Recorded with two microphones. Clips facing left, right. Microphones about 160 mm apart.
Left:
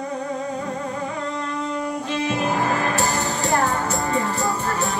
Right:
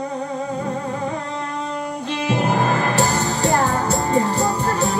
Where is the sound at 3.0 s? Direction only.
40° right (ahead or behind).